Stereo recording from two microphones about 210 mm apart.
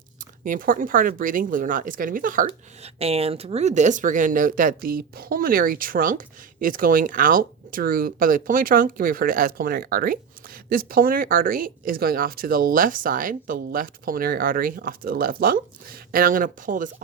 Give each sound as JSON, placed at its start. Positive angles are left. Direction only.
{"t": 0.2, "sound": "speech", "side_deg": -40}